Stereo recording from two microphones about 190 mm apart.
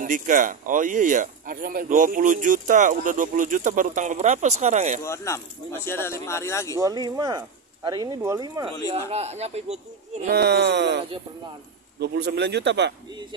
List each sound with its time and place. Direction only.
0.0 s speech: 45° right (ahead or behind)
5.0 s speech: 15° left (ahead or behind)
6.8 s speech: 20° right (ahead or behind)
9.1 s speech: 35° right (ahead or behind)
10.3 s speech: 60° right (ahead or behind)